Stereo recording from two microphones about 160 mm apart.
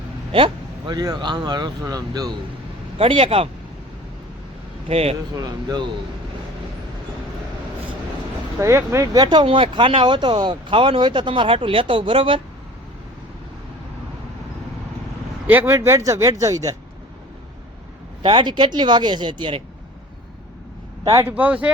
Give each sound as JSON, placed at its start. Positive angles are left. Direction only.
{"t": 0.3, "sound": "speech", "side_deg": -30}
{"t": 3.0, "sound": "speech", "side_deg": -35}
{"t": 4.9, "sound": "speech", "side_deg": -40}
{"t": 5.3, "sound": "speech", "side_deg": -25}
{"t": 8.6, "sound": "speech", "side_deg": -20}
{"t": 15.4, "sound": "speech", "side_deg": -10}
{"t": 18.2, "sound": "speech", "side_deg": -30}
{"t": 21.0, "sound": "a man's voice", "side_deg": -20}